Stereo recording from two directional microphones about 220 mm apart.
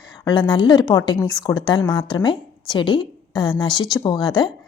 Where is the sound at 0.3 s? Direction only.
20° left (ahead or behind).